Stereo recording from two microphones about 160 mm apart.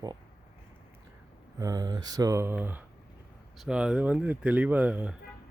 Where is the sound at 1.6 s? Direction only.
20° right (ahead or behind).